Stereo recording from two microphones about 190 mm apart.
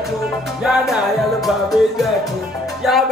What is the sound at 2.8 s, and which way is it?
Music, centre (ahead or behind).